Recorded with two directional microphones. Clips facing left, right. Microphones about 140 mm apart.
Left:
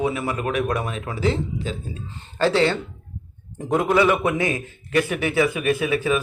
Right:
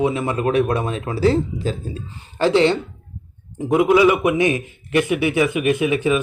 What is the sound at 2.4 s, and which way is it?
A man's voice, 20° right (ahead or behind).